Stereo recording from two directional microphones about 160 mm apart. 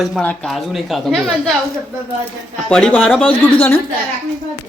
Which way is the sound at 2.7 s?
5° left (ahead or behind).